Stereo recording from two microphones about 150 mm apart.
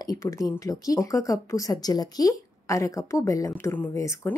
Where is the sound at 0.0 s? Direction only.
25° left (ahead or behind).